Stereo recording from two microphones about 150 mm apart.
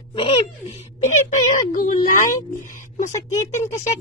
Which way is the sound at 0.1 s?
35° left (ahead or behind).